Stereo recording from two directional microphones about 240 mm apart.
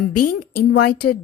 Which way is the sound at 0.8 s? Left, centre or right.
Left.